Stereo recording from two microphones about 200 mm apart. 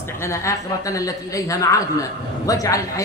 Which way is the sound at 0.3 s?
15° left (ahead or behind).